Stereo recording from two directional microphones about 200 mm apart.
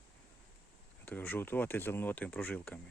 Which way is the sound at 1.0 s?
10° left (ahead or behind).